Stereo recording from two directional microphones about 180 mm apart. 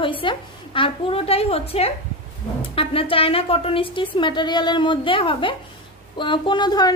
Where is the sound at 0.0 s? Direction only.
30° left (ahead or behind).